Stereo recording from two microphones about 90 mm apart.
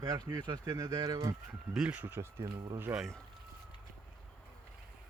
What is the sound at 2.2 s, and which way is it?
Speech, 35° right (ahead or behind).